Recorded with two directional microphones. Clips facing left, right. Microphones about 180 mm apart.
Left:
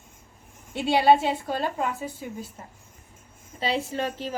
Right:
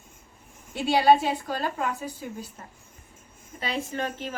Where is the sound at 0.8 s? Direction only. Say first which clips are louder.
Left 1 dB; 20° left (ahead or behind).